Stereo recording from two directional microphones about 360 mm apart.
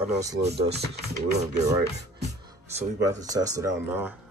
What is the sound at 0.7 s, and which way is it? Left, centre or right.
Speech, right.